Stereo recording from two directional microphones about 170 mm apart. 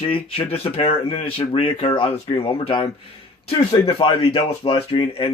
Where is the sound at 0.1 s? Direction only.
35° left (ahead or behind).